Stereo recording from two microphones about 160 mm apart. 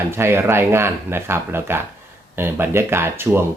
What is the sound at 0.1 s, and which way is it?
Speech, 15° right (ahead or behind).